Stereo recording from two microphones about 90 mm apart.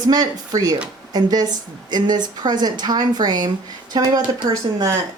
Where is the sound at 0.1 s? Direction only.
45° right (ahead or behind).